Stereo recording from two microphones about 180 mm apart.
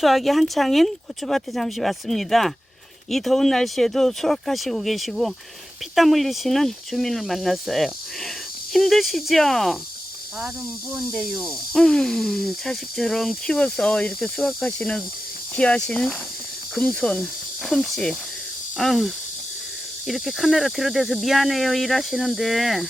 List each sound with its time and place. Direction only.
0.0 s speech: centre (ahead or behind)
11.1 s speech: centre (ahead or behind)